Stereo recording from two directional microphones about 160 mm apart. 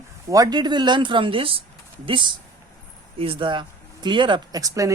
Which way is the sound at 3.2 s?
35° right (ahead or behind).